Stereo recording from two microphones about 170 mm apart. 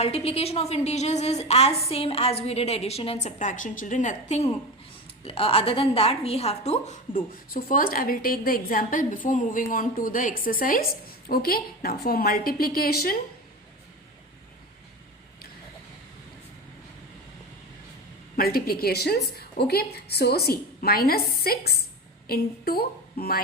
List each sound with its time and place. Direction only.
0.0 s a woman's voice: 35° left (ahead or behind); by 13.1 s 60° left (ahead or behind)
18.3 s a woman's voice: 60° left (ahead or behind)